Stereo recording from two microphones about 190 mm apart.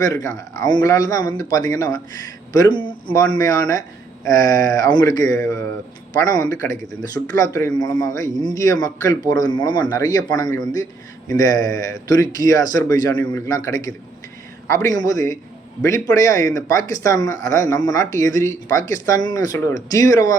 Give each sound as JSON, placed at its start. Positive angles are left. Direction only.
{"t": 0.0, "sound": "a man's voice", "side_deg": 15}
{"t": 15.0, "sound": "a man's voice", "side_deg": 20}